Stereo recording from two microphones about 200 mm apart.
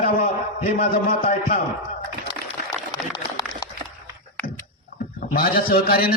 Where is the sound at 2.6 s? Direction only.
20° left (ahead or behind).